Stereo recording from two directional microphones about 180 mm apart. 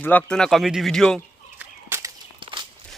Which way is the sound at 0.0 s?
10° left (ahead or behind).